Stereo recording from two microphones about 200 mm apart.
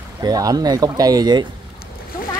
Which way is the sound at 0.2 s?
20° right (ahead or behind).